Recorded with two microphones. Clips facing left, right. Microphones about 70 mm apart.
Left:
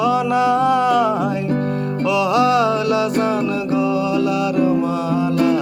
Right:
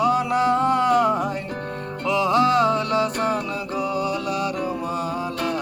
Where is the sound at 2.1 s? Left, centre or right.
Right.